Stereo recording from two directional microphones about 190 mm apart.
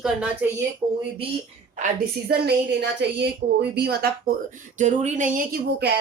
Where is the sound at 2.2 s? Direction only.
55° right (ahead or behind).